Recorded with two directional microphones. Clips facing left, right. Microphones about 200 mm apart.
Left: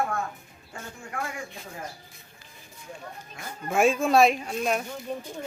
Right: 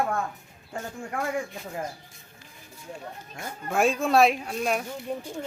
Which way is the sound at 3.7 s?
Centre (ahead or behind).